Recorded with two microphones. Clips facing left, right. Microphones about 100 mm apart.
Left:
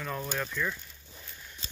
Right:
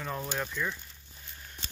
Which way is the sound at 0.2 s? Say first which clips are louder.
Left 1 dB; 15° right (ahead or behind).